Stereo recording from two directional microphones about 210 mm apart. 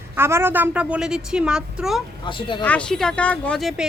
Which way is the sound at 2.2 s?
20° left (ahead or behind).